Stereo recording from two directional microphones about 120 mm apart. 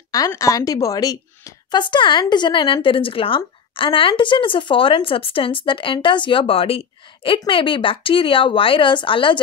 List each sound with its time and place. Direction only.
0.3 s a woman's voice: 30° left (ahead or behind); by 9.4 s 45° left (ahead or behind)